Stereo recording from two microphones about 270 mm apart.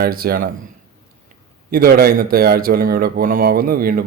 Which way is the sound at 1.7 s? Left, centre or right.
Right.